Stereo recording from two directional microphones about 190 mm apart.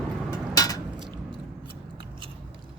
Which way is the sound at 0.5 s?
20° left (ahead or behind).